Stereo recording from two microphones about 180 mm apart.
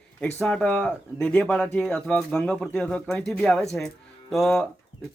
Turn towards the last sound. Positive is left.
turn(degrees=0)  # may be behind; listen again after turning